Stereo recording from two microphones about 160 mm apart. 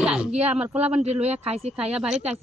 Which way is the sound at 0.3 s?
40° right (ahead or behind).